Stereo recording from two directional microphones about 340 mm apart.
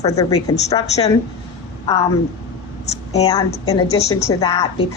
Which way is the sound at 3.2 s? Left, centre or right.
Centre.